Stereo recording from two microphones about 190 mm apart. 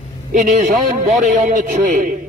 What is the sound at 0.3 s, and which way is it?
A man's voice, 40° right (ahead or behind).